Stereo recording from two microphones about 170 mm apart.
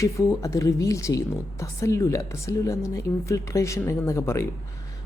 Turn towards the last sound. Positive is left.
turn(degrees=15)  # may be behind; listen again after turning